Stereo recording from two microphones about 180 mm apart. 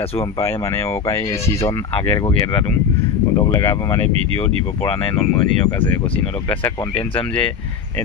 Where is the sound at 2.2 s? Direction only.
25° left (ahead or behind).